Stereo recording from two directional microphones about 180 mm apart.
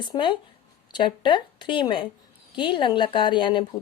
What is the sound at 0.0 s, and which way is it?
Speech, 25° left (ahead or behind).